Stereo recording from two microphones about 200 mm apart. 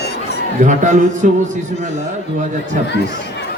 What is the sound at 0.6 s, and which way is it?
Speech, 40° right (ahead or behind).